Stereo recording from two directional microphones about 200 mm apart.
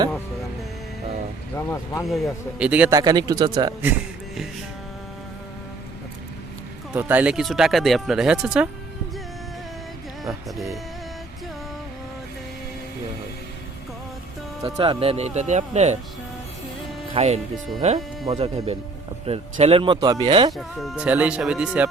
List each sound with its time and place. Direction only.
1.5 s speech: 15° left (ahead or behind)
2.6 s a man's voice: 5° right (ahead or behind)
2.9 s speech: 20° right (ahead or behind)
6.9 s speech: 10° right (ahead or behind)
14.6 s speech: 25° right (ahead or behind)
17.2 s speech: 35° right (ahead or behind)
20.6 s speech: centre (ahead or behind)